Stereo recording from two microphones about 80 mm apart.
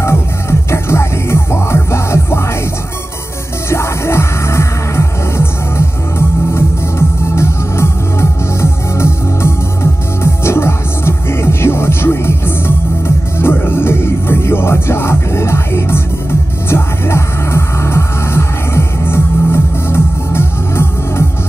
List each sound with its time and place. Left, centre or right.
0.0 s music: left
3.7 s music: left